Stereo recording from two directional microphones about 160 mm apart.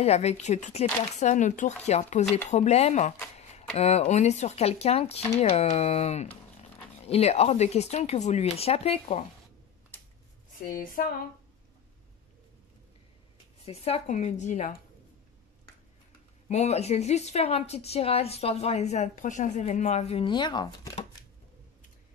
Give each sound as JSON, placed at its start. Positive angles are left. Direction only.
{"t": 0.0, "sound": "a woman's voice", "side_deg": 40}
{"t": 10.7, "sound": "a sound", "side_deg": 60}
{"t": 13.7, "sound": "speech", "side_deg": 40}
{"t": 16.4, "sound": "a woman's voice", "side_deg": 45}